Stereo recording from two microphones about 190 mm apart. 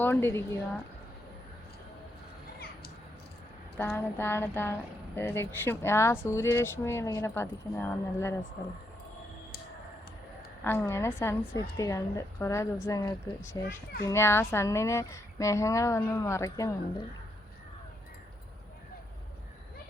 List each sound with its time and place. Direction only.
0.0 s speech: 10° left (ahead or behind)
3.8 s speech: 10° left (ahead or behind)
10.6 s speech: 10° left (ahead or behind)